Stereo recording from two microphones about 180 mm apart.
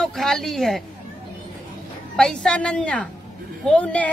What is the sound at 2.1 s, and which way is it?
A woman's voice, 5° left (ahead or behind).